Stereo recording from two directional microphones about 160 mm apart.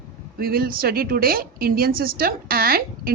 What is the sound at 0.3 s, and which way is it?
A woman's voice, 70° right (ahead or behind).